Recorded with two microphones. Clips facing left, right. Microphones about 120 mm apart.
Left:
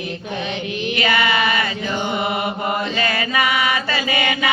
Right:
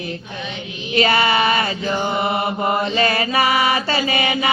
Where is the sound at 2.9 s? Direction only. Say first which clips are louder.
Right 3 dB; 30° right (ahead or behind).